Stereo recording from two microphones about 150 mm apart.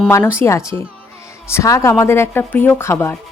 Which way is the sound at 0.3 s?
20° left (ahead or behind).